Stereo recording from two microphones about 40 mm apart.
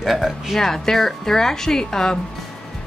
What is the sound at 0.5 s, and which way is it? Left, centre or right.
A woman's voice, centre.